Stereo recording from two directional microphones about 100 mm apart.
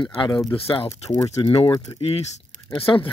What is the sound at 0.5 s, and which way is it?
Speech, 65° left (ahead or behind).